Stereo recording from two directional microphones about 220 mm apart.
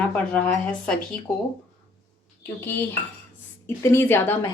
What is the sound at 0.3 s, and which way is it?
Speech, 5° left (ahead or behind).